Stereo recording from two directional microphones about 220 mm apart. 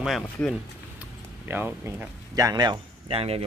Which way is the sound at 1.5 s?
10° right (ahead or behind).